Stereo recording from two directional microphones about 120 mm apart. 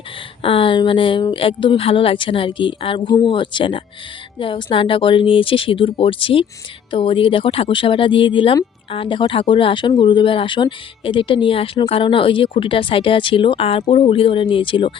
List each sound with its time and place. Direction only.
0.4 s speech: 50° left (ahead or behind)